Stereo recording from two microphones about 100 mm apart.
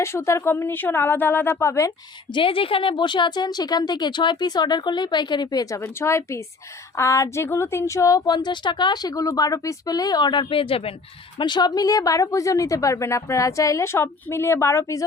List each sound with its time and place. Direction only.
0.0 s a woman's voice: 25° left (ahead or behind)
2.3 s a woman's voice: 60° left (ahead or behind); by 5.8 s 40° left (ahead or behind)
5.8 s a woman's voice: 25° left (ahead or behind)
8.3 s a woman's voice: 45° left (ahead or behind); by 10.9 s 70° left (ahead or behind)
11.3 s speech: 50° left (ahead or behind); by 15.0 s 30° left (ahead or behind)